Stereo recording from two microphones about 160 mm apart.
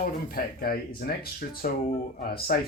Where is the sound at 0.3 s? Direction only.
65° left (ahead or behind).